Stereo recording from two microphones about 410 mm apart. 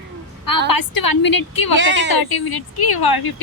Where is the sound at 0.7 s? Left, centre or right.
Left.